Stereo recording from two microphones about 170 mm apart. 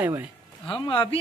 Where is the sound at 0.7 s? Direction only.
30° left (ahead or behind).